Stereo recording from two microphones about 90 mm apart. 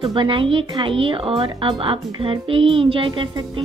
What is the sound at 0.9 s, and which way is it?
Speech, 85° right.